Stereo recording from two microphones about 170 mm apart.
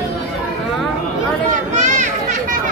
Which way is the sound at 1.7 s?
45° right (ahead or behind).